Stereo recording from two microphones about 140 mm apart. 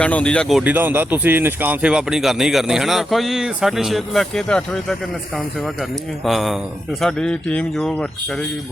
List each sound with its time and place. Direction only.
0.0 s speech: 10° left (ahead or behind)
0.6 s speech: 10° right (ahead or behind); by 4.9 s 5° left (ahead or behind)
6.2 s speech: centre (ahead or behind)